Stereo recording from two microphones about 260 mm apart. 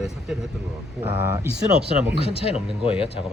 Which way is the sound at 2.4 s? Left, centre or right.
Left.